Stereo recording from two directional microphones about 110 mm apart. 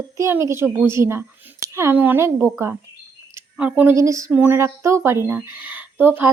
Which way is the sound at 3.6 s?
10° right (ahead or behind).